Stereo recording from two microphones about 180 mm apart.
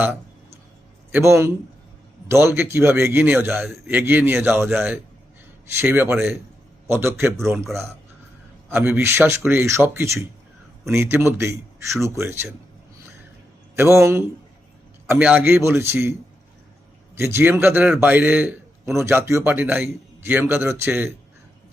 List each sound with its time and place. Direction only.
1.1 s speech: 15° right (ahead or behind)
13.7 s speech: 15° right (ahead or behind)
17.2 s speech: 15° right (ahead or behind)